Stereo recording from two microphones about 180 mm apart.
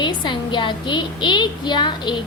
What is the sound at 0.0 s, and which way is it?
A woman's voice, 25° left (ahead or behind).